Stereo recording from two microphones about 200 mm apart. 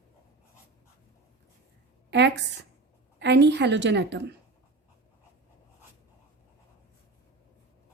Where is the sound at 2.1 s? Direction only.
60° right (ahead or behind).